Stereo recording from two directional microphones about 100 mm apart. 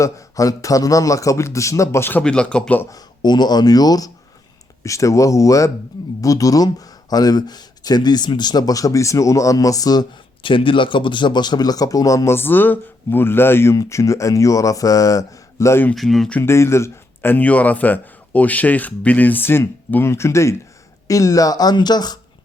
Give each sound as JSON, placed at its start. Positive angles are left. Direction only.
{"t": 0.0, "sound": "a man's voice", "side_deg": 35}
{"t": 2.2, "sound": "a man's voice", "side_deg": 10}
{"t": 2.9, "sound": "a man's voice", "side_deg": 45}
{"t": 10.4, "sound": "a man's voice", "side_deg": 60}
{"t": 16.0, "sound": "speech", "side_deg": 0}
{"t": 16.4, "sound": "a man's voice", "side_deg": 25}